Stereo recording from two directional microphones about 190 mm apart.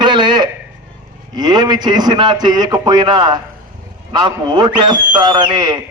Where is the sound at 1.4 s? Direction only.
20° right (ahead or behind).